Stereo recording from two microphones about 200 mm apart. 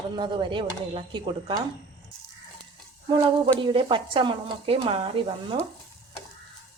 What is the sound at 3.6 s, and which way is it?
Speech, 25° right (ahead or behind).